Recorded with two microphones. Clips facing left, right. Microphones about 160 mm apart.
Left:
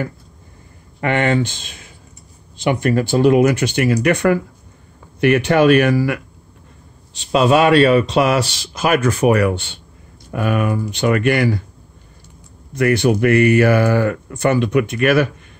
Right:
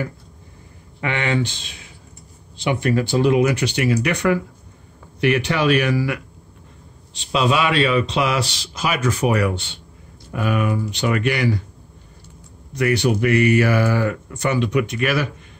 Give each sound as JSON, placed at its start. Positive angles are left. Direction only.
{"t": 1.0, "sound": "speech", "side_deg": 50}
{"t": 12.7, "sound": "speech", "side_deg": 50}